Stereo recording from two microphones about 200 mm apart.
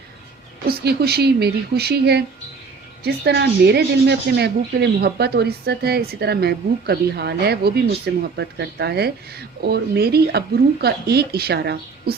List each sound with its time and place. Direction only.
0.7 s speech: 55° right (ahead or behind)